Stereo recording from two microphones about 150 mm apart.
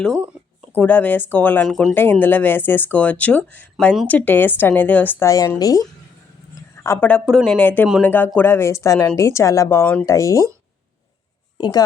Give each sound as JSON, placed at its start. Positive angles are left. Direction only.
{"t": 0.8, "sound": "speech", "side_deg": 10}
{"t": 6.8, "sound": "speech", "side_deg": 15}
{"t": 7.3, "sound": "speech", "side_deg": 0}
{"t": 10.1, "sound": "speech", "side_deg": 20}
{"t": 11.5, "sound": "speech", "side_deg": 30}